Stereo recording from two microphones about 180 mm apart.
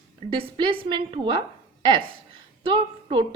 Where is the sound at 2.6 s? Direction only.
25° right (ahead or behind).